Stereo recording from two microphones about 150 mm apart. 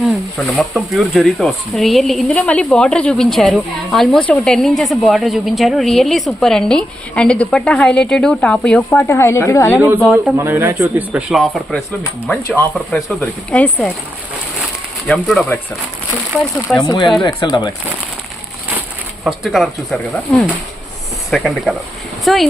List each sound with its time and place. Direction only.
0.3 s a woman's voice: 10° left (ahead or behind)
10.0 s a woman's voice: centre (ahead or behind)
10.3 s speech: 15° right (ahead or behind)
12.3 s speech: 10° left (ahead or behind)
15.0 s a woman's voice: centre (ahead or behind)
16.8 s speech: 25° left (ahead or behind)
19.2 s a woman's voice: centre (ahead or behind)